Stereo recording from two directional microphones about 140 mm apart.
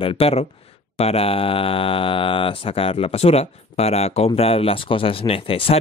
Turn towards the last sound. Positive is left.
turn(degrees=40)  # may be behind; listen again after turning